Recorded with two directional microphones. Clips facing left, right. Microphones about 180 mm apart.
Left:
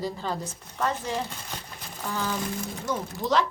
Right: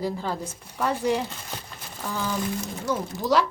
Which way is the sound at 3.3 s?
10° right (ahead or behind).